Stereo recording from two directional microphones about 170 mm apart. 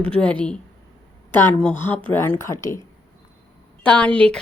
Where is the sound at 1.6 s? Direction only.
10° left (ahead or behind).